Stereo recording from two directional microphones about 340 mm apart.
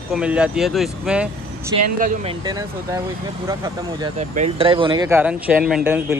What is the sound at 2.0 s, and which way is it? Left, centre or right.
Speech, right.